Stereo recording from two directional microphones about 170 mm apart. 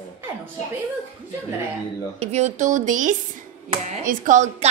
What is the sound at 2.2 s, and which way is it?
A woman's voice, 40° right (ahead or behind).